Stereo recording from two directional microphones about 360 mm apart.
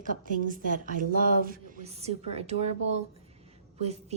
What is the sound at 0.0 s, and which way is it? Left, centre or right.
A woman's voice, right.